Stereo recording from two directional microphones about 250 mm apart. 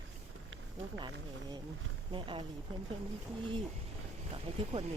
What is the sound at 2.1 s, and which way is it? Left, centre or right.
Speech, centre.